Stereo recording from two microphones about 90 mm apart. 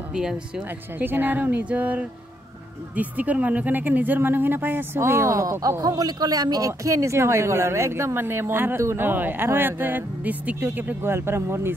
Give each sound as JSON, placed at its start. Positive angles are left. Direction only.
{"t": 0.1, "sound": "speech", "side_deg": -10}
{"t": 0.9, "sound": "speech", "side_deg": -20}